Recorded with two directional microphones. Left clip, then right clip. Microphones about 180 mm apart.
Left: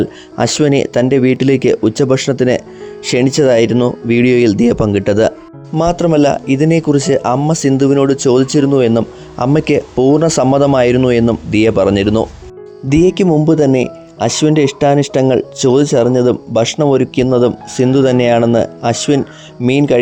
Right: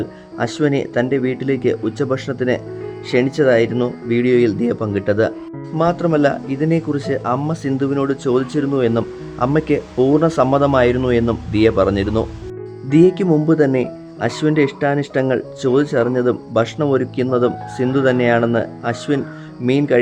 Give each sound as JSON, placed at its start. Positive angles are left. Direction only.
{"t": 0.0, "sound": "speech", "side_deg": 45}